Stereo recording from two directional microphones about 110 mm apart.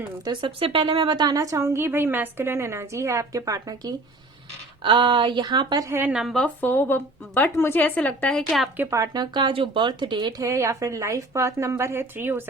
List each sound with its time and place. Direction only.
0.3 s a woman's voice: 55° right (ahead or behind); by 3.9 s 35° right (ahead or behind)
4.8 s speech: 45° right (ahead or behind)
5.9 s a woman's voice: 15° right (ahead or behind)
6.1 s speech: centre (ahead or behind)
6.4 s speech: 15° left (ahead or behind); by 8.7 s centre (ahead or behind)
8.9 s speech: 35° right (ahead or behind)
10.4 s a woman's voice: 25° right (ahead or behind)